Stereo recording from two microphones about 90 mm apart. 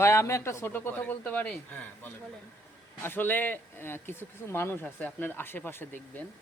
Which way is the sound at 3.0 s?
25° left (ahead or behind).